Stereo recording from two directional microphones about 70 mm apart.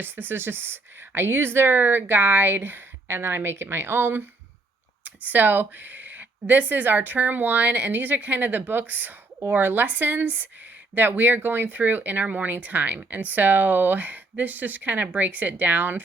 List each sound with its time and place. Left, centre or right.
0.0 s speech: right